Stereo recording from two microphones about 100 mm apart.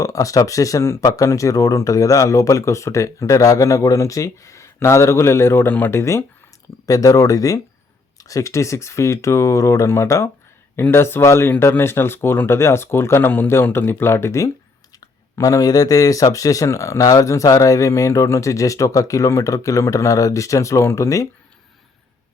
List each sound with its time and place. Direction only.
0.0 s speech: 35° left (ahead or behind)